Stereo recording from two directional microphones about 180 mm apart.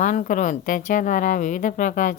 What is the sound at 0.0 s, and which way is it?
Speech, 45° left (ahead or behind).